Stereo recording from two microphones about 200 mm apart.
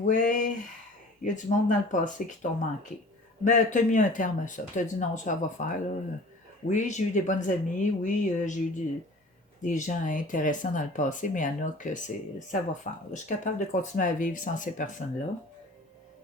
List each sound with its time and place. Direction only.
0.0 s a sound: 40° left (ahead or behind)
1.2 s speech: 40° left (ahead or behind)
9.6 s speech: 40° left (ahead or behind)